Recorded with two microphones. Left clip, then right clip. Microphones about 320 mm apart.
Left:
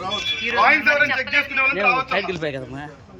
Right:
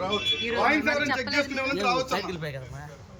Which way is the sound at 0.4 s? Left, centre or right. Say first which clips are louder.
Left 11 dB; centre.